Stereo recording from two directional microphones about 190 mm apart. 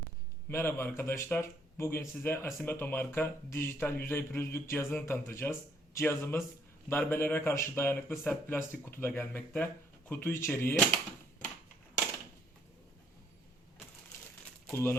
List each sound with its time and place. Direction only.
0.4 s a man's voice: 10° left (ahead or behind)
14.7 s speech: 10° left (ahead or behind)